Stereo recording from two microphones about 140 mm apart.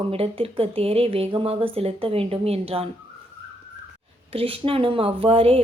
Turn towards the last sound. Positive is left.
turn(degrees=-45)  # may be behind; listen again after turning